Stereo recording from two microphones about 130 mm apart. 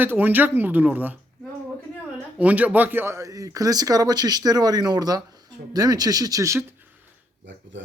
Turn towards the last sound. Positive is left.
turn(degrees=-25)  # may be behind; listen again after turning